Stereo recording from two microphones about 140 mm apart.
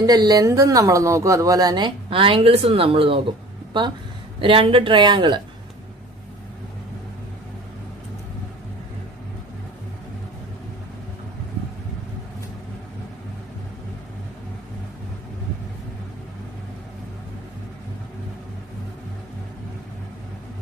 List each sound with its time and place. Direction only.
0.0 s speech: 30° right (ahead or behind)